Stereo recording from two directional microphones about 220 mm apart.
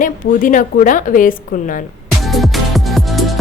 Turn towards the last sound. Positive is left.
turn(degrees=0)  # may be behind; listen again after turning